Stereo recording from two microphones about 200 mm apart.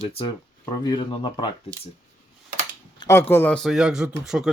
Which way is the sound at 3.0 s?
10° left (ahead or behind).